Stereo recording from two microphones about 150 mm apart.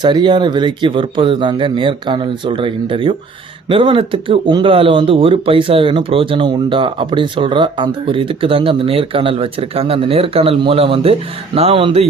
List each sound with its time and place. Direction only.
0.0 s speech: 30° right (ahead or behind)